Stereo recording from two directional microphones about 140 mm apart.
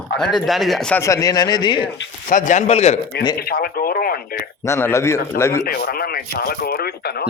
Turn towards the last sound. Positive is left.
turn(degrees=90)